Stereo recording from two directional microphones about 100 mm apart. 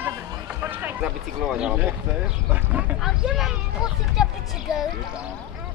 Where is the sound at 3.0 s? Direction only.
5° right (ahead or behind).